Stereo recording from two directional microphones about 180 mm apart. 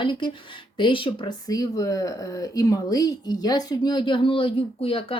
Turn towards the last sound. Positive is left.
turn(degrees=30)  # may be behind; listen again after turning